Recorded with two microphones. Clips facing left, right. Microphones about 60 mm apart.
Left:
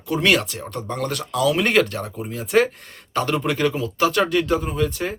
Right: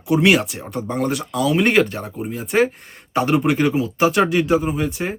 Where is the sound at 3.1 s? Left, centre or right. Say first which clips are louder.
Right 4 dB; centre.